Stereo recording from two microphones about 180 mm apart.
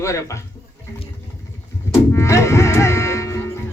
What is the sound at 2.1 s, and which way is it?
Music, 15° left (ahead or behind).